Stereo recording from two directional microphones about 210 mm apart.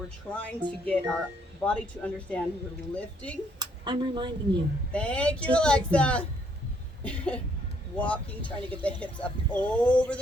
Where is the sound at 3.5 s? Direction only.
20° right (ahead or behind).